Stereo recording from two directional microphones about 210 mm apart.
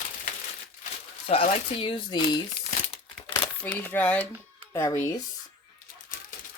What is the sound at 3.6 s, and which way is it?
Speech, 10° left (ahead or behind).